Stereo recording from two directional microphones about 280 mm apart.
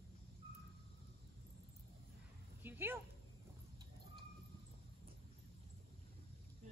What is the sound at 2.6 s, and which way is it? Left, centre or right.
Dog, centre.